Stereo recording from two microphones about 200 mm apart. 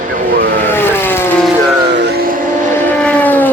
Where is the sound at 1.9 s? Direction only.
55° right (ahead or behind).